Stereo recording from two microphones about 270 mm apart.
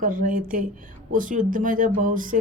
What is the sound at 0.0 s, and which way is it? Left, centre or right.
A man's voice, right.